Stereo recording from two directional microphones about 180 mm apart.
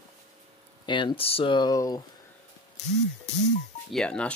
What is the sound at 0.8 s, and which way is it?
Speech, 25° left (ahead or behind).